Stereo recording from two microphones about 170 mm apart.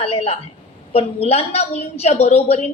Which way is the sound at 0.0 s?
35° left (ahead or behind).